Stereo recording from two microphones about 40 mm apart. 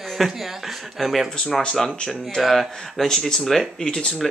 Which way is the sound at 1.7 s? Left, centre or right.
Centre.